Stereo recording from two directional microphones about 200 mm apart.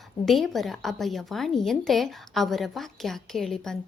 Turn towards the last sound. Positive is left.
turn(degrees=0)  # may be behind; listen again after turning